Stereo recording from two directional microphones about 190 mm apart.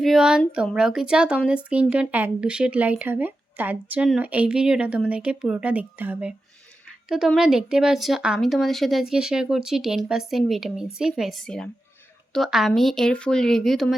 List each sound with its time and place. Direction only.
0.0 s speech: centre (ahead or behind)